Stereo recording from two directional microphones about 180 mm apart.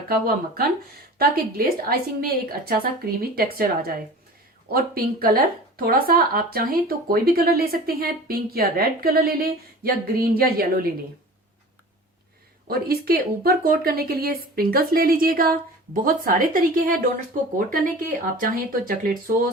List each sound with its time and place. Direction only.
0.1 s speech: 55° right (ahead or behind)
12.6 s speech: 55° right (ahead or behind)
18.3 s speech: 50° right (ahead or behind)